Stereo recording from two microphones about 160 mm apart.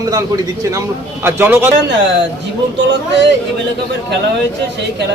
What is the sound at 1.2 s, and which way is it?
Speech, 15° right (ahead or behind).